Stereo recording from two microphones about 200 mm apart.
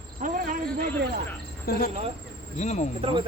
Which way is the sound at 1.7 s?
45° left (ahead or behind).